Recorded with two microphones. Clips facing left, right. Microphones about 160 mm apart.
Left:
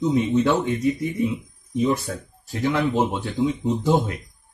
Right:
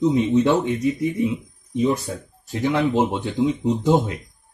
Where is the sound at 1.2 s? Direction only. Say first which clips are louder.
Right 1 dB; 25° right (ahead or behind).